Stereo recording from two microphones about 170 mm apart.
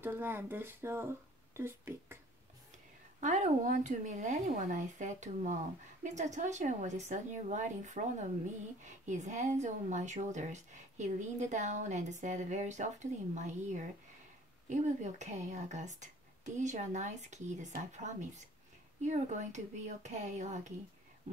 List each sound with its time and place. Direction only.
0.0 s speech: 10° right (ahead or behind)
3.2 s speech: 45° right (ahead or behind)